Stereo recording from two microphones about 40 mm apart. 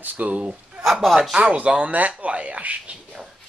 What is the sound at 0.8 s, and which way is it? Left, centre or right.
Speech, centre.